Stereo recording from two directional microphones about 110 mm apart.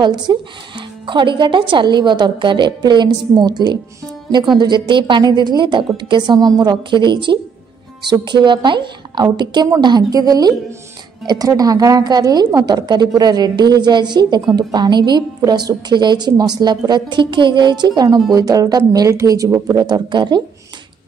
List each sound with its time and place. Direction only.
0.0 s a woman's voice: 45° right (ahead or behind)